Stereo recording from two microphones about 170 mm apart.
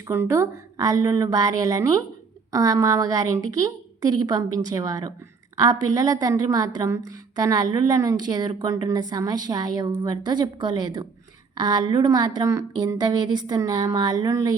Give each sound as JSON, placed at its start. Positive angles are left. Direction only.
{"t": 0.1, "sound": "a woman's voice", "side_deg": -15}